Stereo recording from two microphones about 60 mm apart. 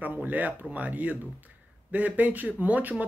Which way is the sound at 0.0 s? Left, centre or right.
Right.